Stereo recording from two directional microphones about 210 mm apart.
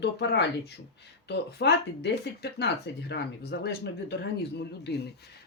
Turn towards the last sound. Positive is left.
turn(degrees=50)  # may be behind; listen again after turning